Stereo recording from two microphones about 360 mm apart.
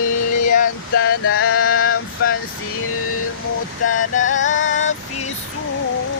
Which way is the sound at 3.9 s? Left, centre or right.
Left.